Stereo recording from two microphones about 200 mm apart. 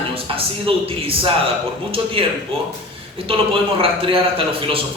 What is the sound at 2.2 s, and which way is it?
A man's voice, 25° right (ahead or behind).